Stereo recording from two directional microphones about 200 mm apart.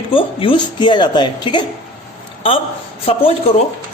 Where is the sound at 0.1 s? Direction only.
25° left (ahead or behind).